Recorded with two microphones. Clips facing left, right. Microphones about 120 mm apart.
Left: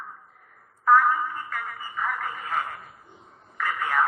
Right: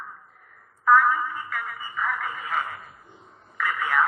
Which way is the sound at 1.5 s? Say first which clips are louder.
Right 1 dB; 35° left (ahead or behind).